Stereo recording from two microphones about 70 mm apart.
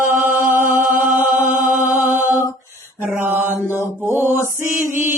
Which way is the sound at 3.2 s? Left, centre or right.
Right.